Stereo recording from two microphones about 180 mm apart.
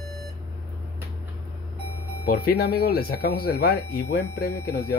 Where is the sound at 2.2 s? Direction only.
55° left (ahead or behind).